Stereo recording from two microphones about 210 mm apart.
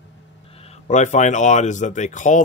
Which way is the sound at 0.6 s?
35° left (ahead or behind).